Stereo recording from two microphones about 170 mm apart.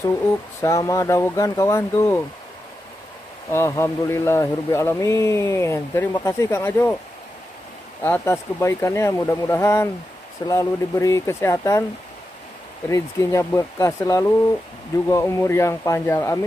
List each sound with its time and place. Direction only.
0.6 s speech: 20° left (ahead or behind)
3.4 s speech: 15° left (ahead or behind)
8.0 s speech: 15° left (ahead or behind)
12.9 s speech: 15° left (ahead or behind)